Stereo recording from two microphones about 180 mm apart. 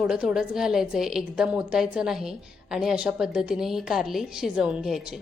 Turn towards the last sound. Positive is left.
turn(degrees=0)  # may be behind; listen again after turning